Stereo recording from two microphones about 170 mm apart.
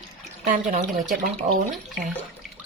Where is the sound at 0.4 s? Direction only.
50° right (ahead or behind).